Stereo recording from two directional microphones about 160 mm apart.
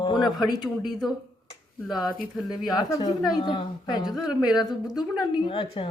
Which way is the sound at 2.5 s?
25° left (ahead or behind).